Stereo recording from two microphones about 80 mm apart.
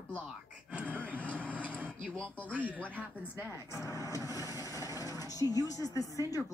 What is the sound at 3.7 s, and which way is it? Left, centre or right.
Speech, left.